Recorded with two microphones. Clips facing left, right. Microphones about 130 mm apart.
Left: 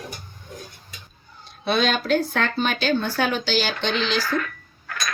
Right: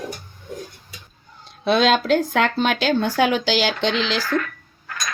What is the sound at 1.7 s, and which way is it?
Speech, 90° right.